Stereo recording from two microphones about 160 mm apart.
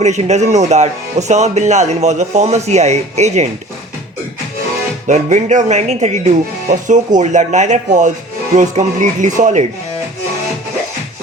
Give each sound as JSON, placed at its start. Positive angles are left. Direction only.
{"t": 0.0, "sound": "speech", "side_deg": -45}
{"t": 5.0, "sound": "speech", "side_deg": -50}